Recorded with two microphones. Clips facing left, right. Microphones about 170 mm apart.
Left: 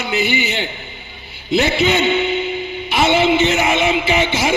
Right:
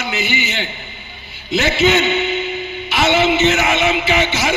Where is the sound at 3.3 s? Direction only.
30° left (ahead or behind).